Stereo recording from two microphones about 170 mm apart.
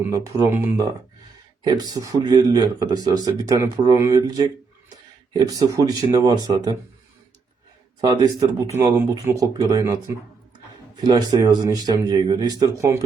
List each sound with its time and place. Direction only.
0.1 s speech: 15° right (ahead or behind)
8.0 s speech: 25° right (ahead or behind)